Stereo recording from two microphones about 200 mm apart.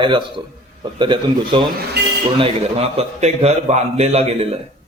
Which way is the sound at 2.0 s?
55° right (ahead or behind).